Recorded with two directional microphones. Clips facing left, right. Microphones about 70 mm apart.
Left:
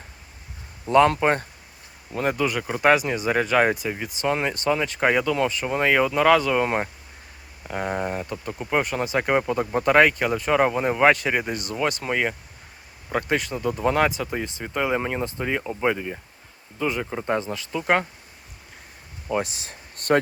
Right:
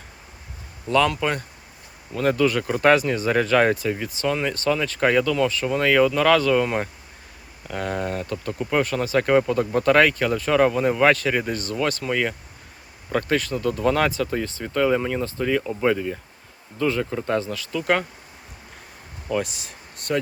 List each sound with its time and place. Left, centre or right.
0.9 s speech: left
1.1 s speech: left
2.1 s speech: centre
19.3 s speech: left